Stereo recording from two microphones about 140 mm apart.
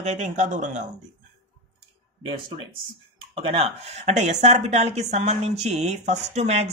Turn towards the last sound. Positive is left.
turn(degrees=-50)  # may be behind; listen again after turning